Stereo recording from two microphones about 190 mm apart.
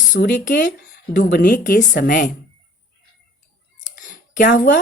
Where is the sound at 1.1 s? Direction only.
60° left (ahead or behind).